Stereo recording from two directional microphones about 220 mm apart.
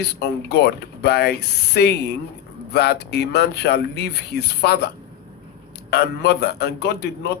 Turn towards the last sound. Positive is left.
turn(degrees=50)  # may be behind; listen again after turning